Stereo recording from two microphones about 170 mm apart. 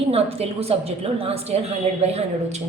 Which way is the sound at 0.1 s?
35° right (ahead or behind).